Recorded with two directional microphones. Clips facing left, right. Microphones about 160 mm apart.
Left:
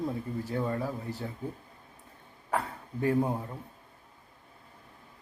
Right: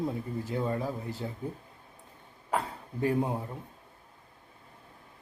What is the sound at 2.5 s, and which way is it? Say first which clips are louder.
Speech: even; 15° right (ahead or behind).